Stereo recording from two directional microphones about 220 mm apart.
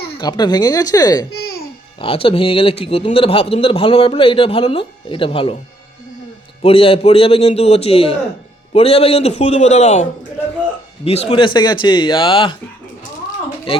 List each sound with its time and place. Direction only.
0.2 s a man's voice: 20° left (ahead or behind)
6.6 s a man's voice: 25° left (ahead or behind)